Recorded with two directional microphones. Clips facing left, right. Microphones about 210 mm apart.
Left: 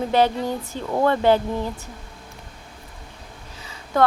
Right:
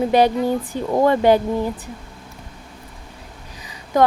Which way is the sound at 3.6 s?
15° right (ahead or behind).